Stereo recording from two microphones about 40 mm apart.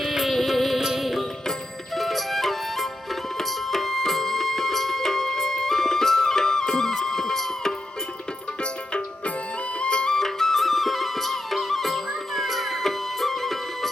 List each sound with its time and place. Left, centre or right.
0.0 s music: centre
9.8 s music: left
10.2 s music: centre